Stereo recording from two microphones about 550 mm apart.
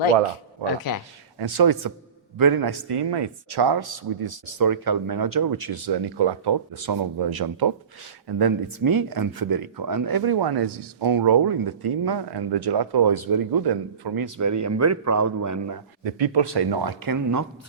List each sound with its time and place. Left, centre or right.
0.6 s speech: left
1.4 s speech: right
16.0 s speech: right